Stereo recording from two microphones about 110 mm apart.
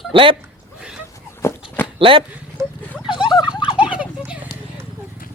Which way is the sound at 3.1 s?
45° left (ahead or behind).